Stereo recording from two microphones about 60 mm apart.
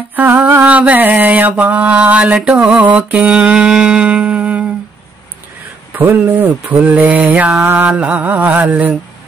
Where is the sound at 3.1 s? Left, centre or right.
Right.